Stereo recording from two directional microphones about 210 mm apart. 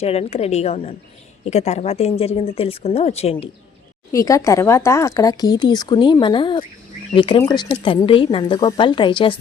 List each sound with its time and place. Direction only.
0.0 s a woman's voice: 30° left (ahead or behind)
4.1 s a woman's voice: 15° left (ahead or behind)